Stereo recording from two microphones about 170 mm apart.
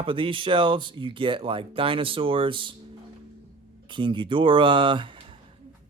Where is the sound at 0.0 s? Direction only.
30° right (ahead or behind).